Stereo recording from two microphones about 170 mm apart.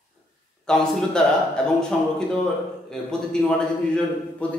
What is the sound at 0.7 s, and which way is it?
A man's voice, 5° left (ahead or behind).